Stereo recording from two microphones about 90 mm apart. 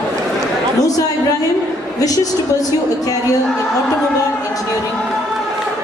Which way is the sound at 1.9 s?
40° left (ahead or behind).